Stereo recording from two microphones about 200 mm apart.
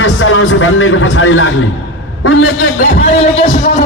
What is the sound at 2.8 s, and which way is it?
Speech, 40° left (ahead or behind).